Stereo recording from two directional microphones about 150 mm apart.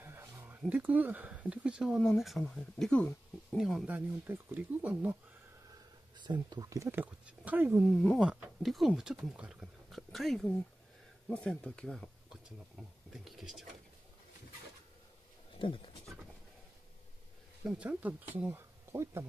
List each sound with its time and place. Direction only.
0.0 s a sound: 15° right (ahead or behind)
0.6 s speech: 10° right (ahead or behind); by 3.5 s 10° left (ahead or behind)
3.5 s speech: centre (ahead or behind)
6.1 s speech: 30° right (ahead or behind); by 7.9 s 10° right (ahead or behind)
7.9 s speech: 5° left (ahead or behind)
8.2 s speech: 5° right (ahead or behind)
15.6 s speech: 35° left (ahead or behind)
17.6 s speech: 10° right (ahead or behind)